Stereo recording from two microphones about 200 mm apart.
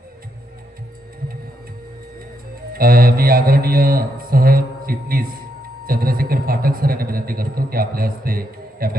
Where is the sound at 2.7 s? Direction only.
45° right (ahead or behind).